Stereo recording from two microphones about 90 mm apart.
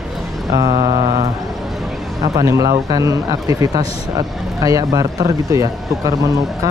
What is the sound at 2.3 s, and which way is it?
Speech, 40° right (ahead or behind).